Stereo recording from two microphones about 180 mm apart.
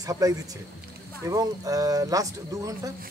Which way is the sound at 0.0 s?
20° right (ahead or behind).